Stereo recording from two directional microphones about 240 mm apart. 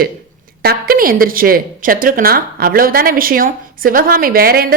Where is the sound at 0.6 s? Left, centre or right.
Right.